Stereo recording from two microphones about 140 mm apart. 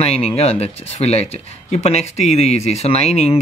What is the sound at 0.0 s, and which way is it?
Speech, 50° left (ahead or behind).